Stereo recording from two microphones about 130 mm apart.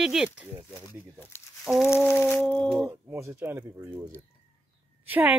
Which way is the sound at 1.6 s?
Centre (ahead or behind).